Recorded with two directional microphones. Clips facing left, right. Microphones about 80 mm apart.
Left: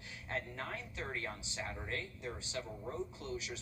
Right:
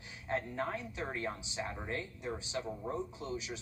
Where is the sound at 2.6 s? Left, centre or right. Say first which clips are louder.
Right 4 dB; right.